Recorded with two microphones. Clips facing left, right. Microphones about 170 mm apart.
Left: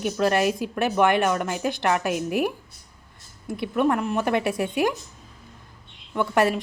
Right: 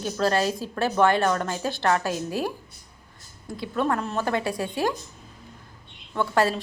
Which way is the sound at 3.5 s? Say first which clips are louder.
Left 3 dB; 20° left (ahead or behind).